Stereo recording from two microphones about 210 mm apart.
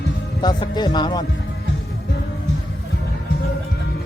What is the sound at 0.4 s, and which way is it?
Speech, 20° left (ahead or behind).